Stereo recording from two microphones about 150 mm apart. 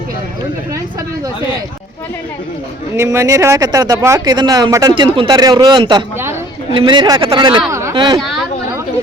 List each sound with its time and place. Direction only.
2.9 s a man's voice: 20° right (ahead or behind)
7.7 s a sound: 20° right (ahead or behind)
7.9 s a man's voice: 30° right (ahead or behind)